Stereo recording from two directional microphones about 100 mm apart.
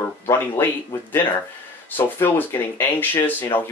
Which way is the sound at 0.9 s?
25° left (ahead or behind).